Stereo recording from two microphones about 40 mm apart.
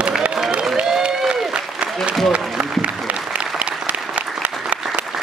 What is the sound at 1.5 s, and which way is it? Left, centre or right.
Applause, right.